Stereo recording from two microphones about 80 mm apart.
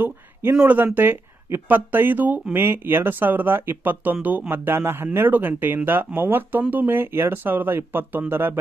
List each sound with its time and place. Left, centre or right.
0.7 s speech: right